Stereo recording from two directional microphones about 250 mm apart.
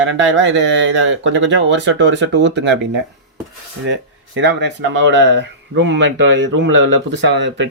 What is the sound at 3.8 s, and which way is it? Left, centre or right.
Speech, right.